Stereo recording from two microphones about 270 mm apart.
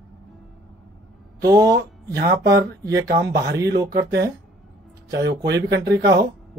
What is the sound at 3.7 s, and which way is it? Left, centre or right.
Speech, right.